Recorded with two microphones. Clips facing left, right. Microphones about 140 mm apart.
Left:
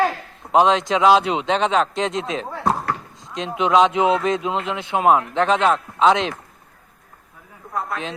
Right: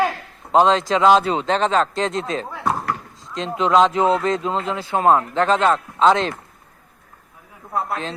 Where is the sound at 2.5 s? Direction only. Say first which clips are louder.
Left 1 dB; 30° left (ahead or behind).